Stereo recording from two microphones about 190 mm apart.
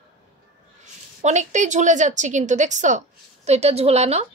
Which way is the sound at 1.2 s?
40° right (ahead or behind).